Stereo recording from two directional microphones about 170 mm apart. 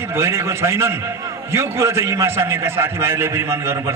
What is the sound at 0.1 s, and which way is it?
A man's voice, 15° right (ahead or behind).